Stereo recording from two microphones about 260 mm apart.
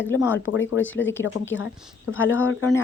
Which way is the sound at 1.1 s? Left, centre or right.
Centre.